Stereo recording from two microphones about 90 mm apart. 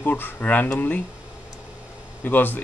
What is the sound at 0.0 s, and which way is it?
Speech, 20° left (ahead or behind).